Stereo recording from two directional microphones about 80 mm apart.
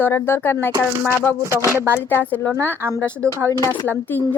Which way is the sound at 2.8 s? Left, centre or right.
Right.